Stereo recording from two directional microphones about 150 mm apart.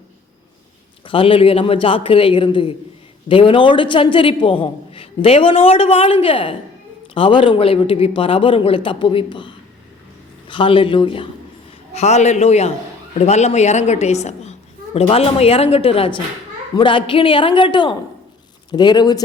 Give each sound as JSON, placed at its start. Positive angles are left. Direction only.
{"t": 1.0, "sound": "a man's voice", "side_deg": 35}
{"t": 11.9, "sound": "a woman's voice", "side_deg": 45}